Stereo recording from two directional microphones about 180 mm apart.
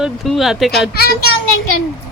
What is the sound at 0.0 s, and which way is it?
Speech, centre (ahead or behind).